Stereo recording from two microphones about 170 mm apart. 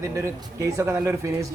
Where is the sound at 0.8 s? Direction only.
15° right (ahead or behind).